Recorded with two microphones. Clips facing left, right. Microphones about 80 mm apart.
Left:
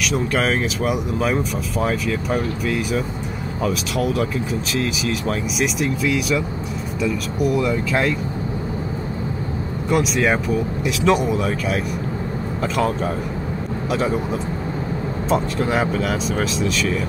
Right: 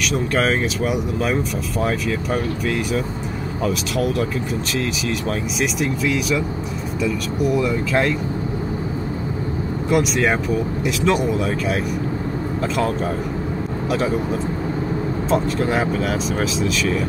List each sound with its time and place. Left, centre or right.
0.1 s speech: centre
5.6 s speech: centre
9.8 s speech: centre
15.2 s speech: centre